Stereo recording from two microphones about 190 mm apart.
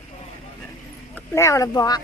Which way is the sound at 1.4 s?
15° left (ahead or behind).